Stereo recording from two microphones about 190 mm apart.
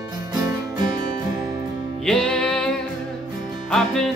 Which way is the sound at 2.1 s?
5° left (ahead or behind).